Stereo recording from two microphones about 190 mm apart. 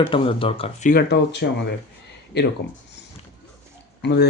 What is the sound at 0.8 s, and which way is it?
Speech, 55° left (ahead or behind).